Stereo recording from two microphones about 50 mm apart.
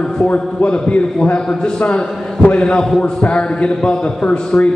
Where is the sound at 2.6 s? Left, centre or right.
Centre.